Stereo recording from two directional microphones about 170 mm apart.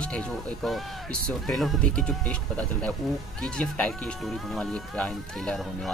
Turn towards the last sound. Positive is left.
turn(degrees=5)  # may be behind; listen again after turning